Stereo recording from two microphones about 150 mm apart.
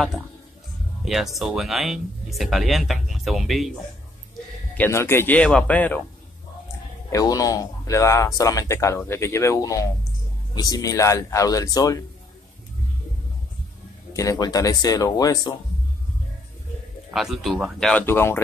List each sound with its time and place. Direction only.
1.0 s speech: centre (ahead or behind)
4.7 s speech: 15° left (ahead or behind)
7.1 s speech: 20° left (ahead or behind)
14.1 s speech: 20° left (ahead or behind)
17.1 s speech: centre (ahead or behind)
18.0 s speech: 15° left (ahead or behind)